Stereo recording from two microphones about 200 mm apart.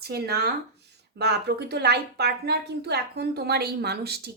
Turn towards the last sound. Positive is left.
turn(degrees=-55)  # may be behind; listen again after turning